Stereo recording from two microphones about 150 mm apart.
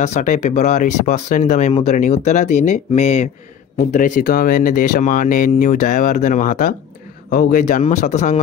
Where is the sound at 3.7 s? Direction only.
60° left (ahead or behind).